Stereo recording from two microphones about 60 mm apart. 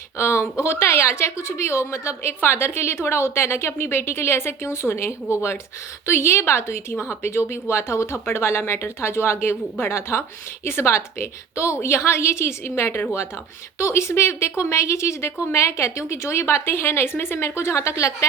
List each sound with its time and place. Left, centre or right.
0.2 s a woman's voice: left